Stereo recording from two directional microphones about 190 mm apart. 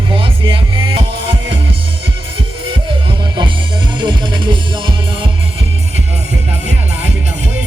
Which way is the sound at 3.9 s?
25° right (ahead or behind).